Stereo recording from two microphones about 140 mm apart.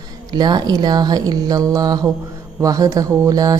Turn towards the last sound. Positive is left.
turn(degrees=-25)  # may be behind; listen again after turning